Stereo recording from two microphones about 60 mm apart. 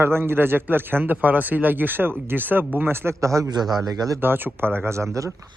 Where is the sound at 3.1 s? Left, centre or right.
Right.